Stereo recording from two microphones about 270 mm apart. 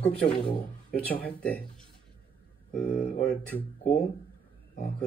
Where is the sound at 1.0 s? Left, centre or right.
Centre.